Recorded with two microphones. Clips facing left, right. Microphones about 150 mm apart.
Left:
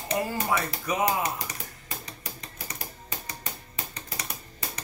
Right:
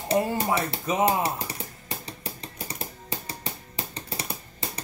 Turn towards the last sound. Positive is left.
turn(degrees=-30)  # may be behind; listen again after turning